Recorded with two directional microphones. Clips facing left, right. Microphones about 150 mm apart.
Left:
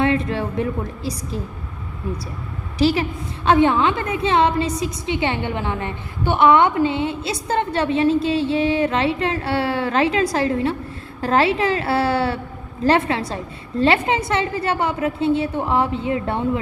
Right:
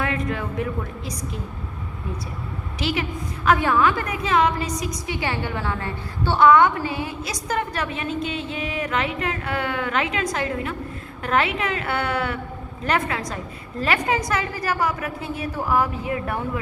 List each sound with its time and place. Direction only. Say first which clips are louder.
0.0 s a woman's voice: left 6 dB; 30° left (ahead or behind)
2.7 s a woman's voice: left 8 dB; 35° left (ahead or behind)